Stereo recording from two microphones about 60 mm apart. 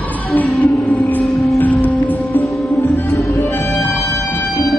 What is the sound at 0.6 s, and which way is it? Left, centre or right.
Music, left.